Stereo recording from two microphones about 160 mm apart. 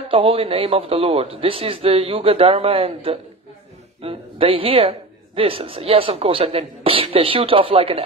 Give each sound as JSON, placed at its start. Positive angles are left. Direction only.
{"t": 0.1, "sound": "speech", "side_deg": -35}